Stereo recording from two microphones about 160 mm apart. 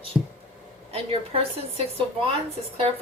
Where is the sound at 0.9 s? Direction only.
35° right (ahead or behind).